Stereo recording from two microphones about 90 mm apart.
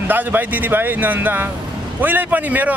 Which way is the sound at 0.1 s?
20° right (ahead or behind).